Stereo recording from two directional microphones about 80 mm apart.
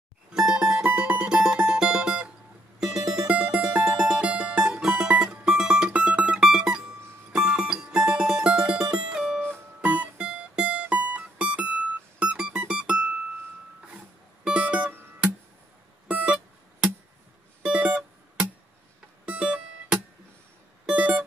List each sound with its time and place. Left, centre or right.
0.3 s mandolin: centre
2.8 s music: centre
14.4 s music: centre
16.1 s music: centre
17.6 s music: centre